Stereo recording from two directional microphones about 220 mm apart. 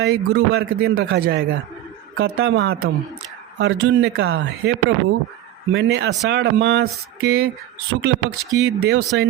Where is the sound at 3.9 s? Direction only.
50° right (ahead or behind).